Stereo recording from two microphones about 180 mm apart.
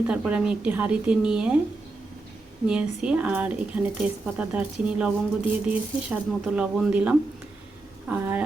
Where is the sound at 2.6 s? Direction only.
5° right (ahead or behind).